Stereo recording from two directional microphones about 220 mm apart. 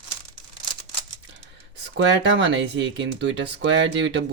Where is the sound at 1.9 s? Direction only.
55° right (ahead or behind).